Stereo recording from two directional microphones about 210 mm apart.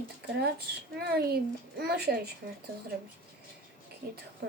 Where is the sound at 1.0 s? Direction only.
50° right (ahead or behind).